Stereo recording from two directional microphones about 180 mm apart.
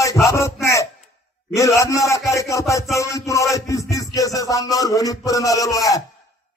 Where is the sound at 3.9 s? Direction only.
20° left (ahead or behind).